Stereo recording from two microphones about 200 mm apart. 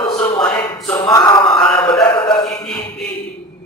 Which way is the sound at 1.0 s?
20° left (ahead or behind).